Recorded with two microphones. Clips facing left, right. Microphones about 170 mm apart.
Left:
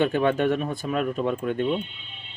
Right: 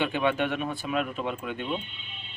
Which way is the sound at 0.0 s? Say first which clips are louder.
Left 5 dB; 45° left (ahead or behind).